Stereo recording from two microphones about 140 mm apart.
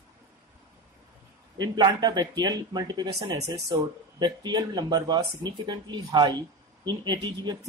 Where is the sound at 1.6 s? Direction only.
30° right (ahead or behind).